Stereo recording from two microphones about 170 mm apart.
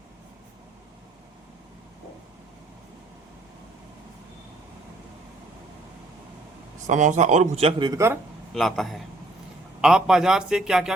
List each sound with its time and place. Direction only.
6.8 s speech: 45° right (ahead or behind); by 8.2 s 15° right (ahead or behind)
8.5 s speech: centre (ahead or behind)